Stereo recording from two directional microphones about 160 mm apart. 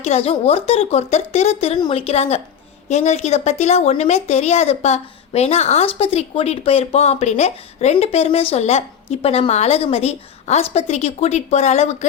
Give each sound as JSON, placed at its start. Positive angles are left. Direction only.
{"t": 0.0, "sound": "speech", "side_deg": 40}